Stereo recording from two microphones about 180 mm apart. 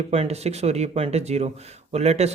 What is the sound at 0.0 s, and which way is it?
Speech, 35° right (ahead or behind).